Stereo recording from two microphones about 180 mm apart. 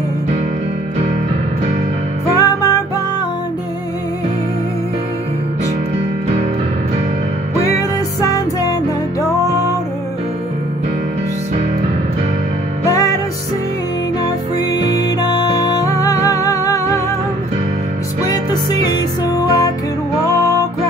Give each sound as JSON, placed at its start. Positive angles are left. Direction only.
{"t": 2.3, "sound": "music", "side_deg": 20}
{"t": 8.3, "sound": "music", "side_deg": 20}
{"t": 9.4, "sound": "music", "side_deg": -20}
{"t": 12.8, "sound": "music", "side_deg": 20}
{"t": 14.7, "sound": "music", "side_deg": 20}
{"t": 18.2, "sound": "music", "side_deg": 20}